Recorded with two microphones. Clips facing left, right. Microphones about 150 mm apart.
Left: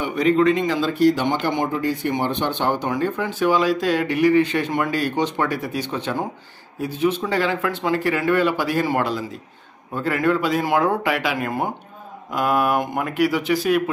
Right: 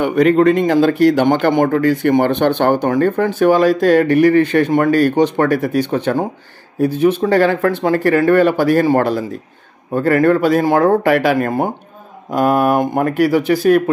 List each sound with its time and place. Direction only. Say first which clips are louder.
0.0 s speech: right 6 dB; 60° right (ahead or behind); by 11.0 s 40° right (ahead or behind)
11.0 s speech: right 9 dB; 50° right (ahead or behind)